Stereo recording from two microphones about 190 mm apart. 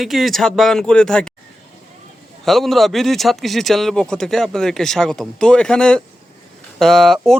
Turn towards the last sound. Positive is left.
turn(degrees=0)  # may be behind; listen again after turning